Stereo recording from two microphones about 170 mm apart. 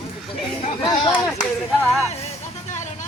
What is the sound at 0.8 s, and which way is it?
Speech, 25° left (ahead or behind).